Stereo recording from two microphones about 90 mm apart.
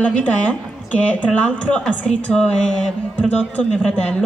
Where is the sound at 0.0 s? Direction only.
15° left (ahead or behind).